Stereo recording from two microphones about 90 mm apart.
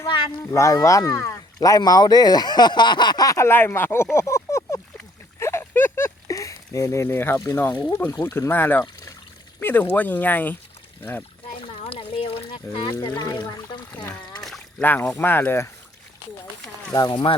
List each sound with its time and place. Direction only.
0.5 s speech: 35° left (ahead or behind)
3.4 s speech: 25° left (ahead or behind)
5.4 s a sound: 30° left (ahead or behind)
6.2 s speech: 35° left (ahead or behind); by 10.6 s 20° left (ahead or behind)
11.5 s a sound: 80° left
12.7 s speech: 25° left (ahead or behind)
13.0 s speech: 50° left (ahead or behind)
14.8 s speech: 20° left (ahead or behind)
16.9 s speech: 45° left (ahead or behind)